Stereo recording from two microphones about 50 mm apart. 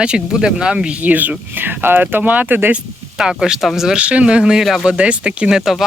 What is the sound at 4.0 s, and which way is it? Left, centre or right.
Speech, right.